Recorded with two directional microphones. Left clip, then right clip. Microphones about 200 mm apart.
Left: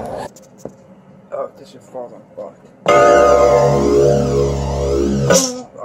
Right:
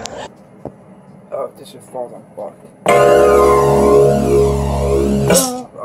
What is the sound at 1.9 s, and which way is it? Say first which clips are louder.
Speech: right 4 dB; 10° right (ahead or behind).